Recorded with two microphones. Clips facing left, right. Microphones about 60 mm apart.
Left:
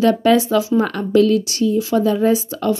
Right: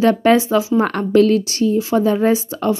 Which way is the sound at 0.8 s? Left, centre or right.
Right.